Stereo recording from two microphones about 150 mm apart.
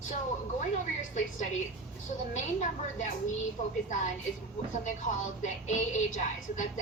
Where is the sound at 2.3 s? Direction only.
55° left (ahead or behind).